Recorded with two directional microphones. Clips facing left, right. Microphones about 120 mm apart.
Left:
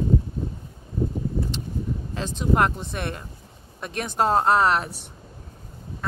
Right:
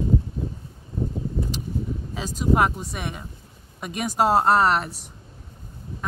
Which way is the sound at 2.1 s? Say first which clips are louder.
Right 1 dB; 5° right (ahead or behind).